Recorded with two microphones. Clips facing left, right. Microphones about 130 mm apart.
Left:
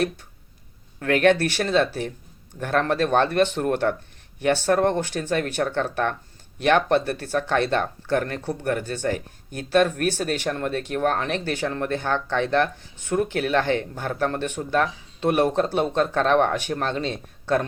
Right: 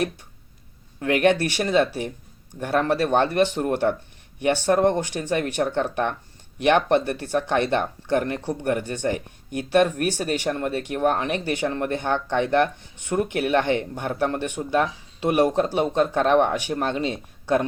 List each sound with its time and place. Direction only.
0.9 s speech: 15° right (ahead or behind)